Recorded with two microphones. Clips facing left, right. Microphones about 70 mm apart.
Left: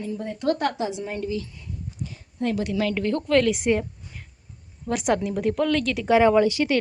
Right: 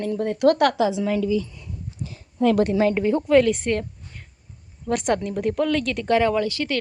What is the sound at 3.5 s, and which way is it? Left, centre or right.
Speech, centre.